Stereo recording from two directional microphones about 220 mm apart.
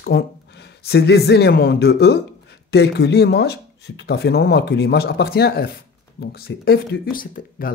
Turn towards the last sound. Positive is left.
turn(degrees=40)  # may be behind; listen again after turning